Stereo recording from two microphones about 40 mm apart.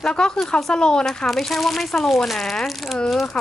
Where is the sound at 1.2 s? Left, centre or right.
Centre.